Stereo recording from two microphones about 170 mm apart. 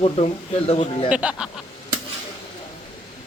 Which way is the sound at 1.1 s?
5° right (ahead or behind).